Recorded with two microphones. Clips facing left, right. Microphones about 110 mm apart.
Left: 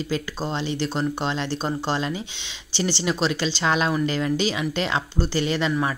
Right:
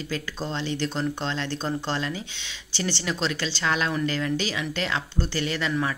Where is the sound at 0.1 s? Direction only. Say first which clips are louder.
Left 2 dB; 20° left (ahead or behind).